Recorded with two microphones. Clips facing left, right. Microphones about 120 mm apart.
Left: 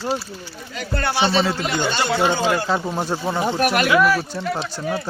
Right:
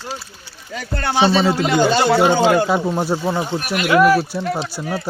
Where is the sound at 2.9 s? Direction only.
5° right (ahead or behind).